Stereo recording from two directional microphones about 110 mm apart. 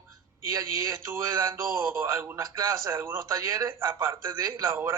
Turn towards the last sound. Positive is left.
turn(degrees=-25)  # may be behind; listen again after turning